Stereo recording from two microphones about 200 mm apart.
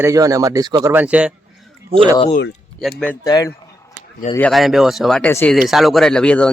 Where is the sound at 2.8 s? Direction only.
Centre (ahead or behind).